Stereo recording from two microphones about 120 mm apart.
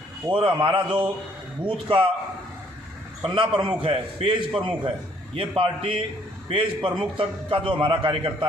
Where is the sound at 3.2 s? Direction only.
45° right (ahead or behind).